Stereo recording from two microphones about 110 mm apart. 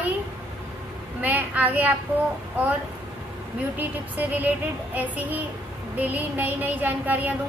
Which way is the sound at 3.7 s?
15° right (ahead or behind).